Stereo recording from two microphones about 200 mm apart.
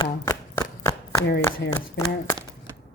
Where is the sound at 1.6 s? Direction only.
65° left (ahead or behind).